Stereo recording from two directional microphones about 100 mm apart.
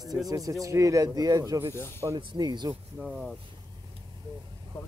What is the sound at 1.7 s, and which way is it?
Speech, 25° left (ahead or behind).